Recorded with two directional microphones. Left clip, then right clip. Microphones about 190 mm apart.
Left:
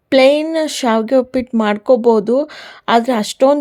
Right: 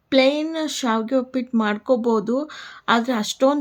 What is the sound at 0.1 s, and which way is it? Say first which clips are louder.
Speech: left 7 dB; 35° left (ahead or behind).